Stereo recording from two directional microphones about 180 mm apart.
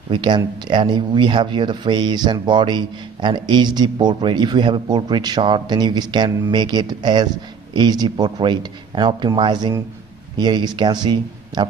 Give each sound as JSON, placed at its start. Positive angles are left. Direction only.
{"t": 0.1, "sound": "speech", "side_deg": -25}